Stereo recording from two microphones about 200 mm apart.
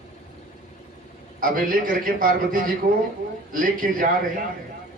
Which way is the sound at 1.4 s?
45° right (ahead or behind).